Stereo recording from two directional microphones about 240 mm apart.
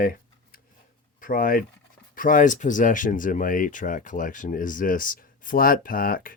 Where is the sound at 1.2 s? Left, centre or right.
Left.